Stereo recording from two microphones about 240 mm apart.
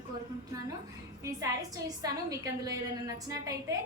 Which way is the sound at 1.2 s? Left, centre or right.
Centre.